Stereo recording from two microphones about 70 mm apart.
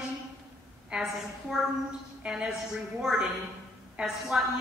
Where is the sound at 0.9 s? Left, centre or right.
Centre.